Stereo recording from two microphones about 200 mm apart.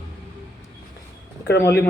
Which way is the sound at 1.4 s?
55° left (ahead or behind).